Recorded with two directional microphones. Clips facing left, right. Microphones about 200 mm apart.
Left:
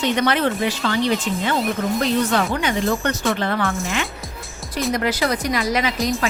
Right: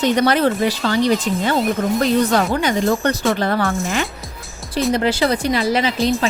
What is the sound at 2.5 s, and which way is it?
Speech, 35° right (ahead or behind).